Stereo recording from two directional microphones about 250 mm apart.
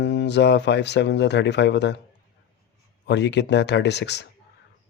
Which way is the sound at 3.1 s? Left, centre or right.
Left.